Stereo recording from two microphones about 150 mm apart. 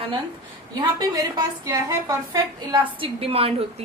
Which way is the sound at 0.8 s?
25° right (ahead or behind).